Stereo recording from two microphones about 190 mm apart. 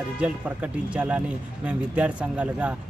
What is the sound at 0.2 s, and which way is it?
Speech, 5° right (ahead or behind).